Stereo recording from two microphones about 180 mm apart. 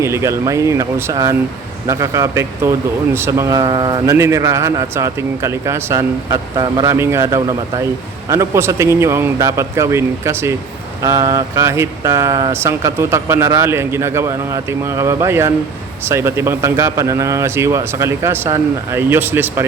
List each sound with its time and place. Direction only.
0.0 s speech: 15° right (ahead or behind)
4.1 s speech: 15° right (ahead or behind)